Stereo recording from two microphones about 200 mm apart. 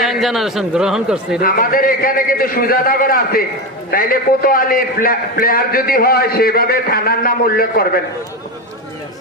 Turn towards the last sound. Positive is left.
turn(degrees=50)  # may be behind; listen again after turning